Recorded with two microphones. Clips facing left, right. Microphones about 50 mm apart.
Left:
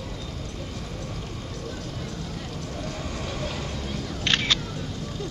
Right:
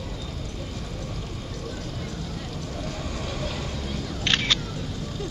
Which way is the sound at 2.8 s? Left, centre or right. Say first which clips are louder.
Even; left.